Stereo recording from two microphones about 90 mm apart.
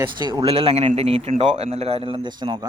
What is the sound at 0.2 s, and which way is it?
Speech, 55° right (ahead or behind).